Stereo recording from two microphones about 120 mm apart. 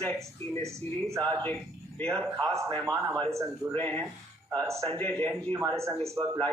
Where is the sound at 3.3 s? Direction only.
25° right (ahead or behind).